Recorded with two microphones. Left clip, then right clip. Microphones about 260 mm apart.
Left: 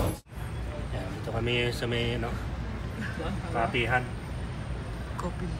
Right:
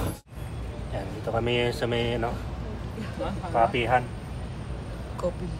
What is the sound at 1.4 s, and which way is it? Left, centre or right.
Speech, right.